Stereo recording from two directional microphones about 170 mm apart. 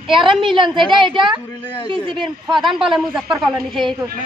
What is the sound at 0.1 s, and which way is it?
A woman's voice, 30° right (ahead or behind).